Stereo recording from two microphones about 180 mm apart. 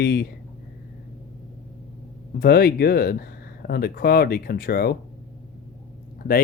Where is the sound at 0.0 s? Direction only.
65° left (ahead or behind).